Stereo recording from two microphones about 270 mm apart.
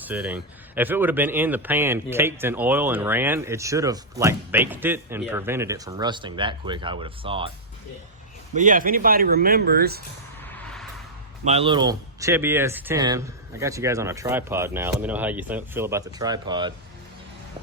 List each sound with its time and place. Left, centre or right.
0.0 s speech: centre
8.5 s speech: right
10.4 s music: centre
11.4 s speech: right